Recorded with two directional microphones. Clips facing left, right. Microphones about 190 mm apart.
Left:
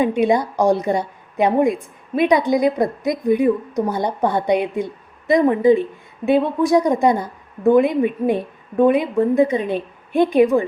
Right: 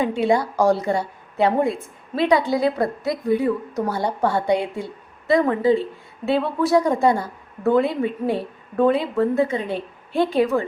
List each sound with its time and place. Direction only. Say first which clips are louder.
0.0 s a woman's voice: left 3 dB; 20° left (ahead or behind)